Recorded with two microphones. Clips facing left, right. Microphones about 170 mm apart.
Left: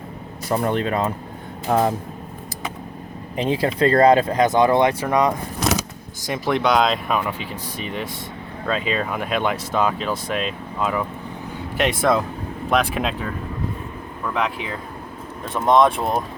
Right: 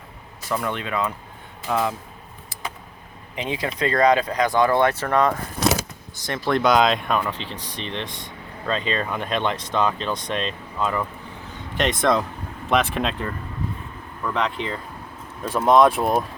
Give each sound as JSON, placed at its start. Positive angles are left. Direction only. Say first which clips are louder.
{"t": 0.4, "sound": "speech", "louder": "left 5 dB", "side_deg": 40}
{"t": 3.3, "sound": "speech", "louder": "left 6 dB", "side_deg": 35}
{"t": 6.3, "sound": "speech", "louder": "even", "side_deg": 5}